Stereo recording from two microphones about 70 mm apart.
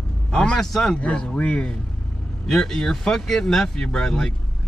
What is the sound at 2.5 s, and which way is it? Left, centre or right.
Speech, centre.